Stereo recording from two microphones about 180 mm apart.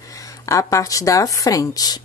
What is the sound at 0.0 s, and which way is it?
A woman's voice, 20° left (ahead or behind).